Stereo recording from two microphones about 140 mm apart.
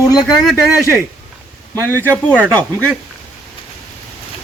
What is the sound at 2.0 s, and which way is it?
Speech, 15° right (ahead or behind).